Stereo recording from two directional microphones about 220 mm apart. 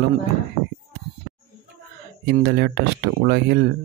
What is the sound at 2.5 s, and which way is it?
Speech, 45° right (ahead or behind).